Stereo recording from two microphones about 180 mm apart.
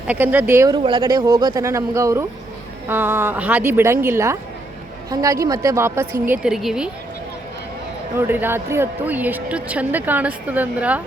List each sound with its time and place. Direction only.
0.1 s a woman's voice: 10° right (ahead or behind)
0.8 s a woman's voice: 25° right (ahead or behind); by 6.9 s 5° right (ahead or behind)
8.3 s a woman's voice: 10° right (ahead or behind)